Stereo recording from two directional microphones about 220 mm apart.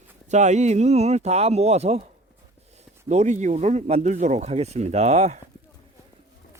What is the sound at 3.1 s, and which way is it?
Speech, 35° right (ahead or behind).